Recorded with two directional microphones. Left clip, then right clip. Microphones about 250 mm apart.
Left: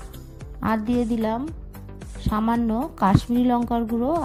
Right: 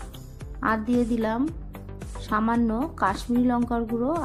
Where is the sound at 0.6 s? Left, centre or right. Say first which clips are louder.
Even; left.